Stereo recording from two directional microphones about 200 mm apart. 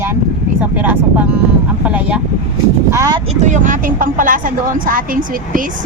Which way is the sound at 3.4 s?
40° right (ahead or behind).